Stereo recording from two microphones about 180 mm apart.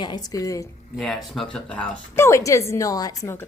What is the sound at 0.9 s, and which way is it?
A woman's voice, centre (ahead or behind).